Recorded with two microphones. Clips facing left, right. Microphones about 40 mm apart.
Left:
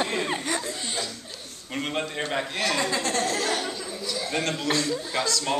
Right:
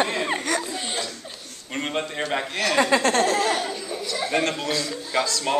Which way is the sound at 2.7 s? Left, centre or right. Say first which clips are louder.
Right 7 dB; right.